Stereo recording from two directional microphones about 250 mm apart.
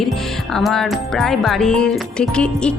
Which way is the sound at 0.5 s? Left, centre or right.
Centre.